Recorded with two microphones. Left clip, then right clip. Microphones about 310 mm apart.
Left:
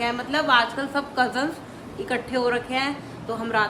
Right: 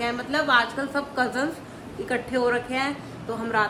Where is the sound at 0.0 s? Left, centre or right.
Centre.